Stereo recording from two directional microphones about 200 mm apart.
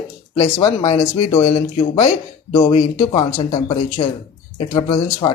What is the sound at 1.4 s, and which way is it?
Speech, 35° left (ahead or behind).